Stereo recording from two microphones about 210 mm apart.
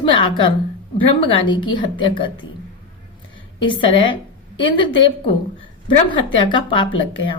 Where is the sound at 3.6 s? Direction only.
25° left (ahead or behind).